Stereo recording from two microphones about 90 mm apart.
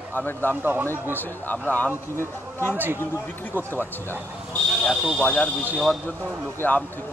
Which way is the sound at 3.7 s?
25° left (ahead or behind).